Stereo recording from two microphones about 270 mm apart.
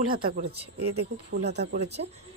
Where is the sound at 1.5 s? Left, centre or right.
Right.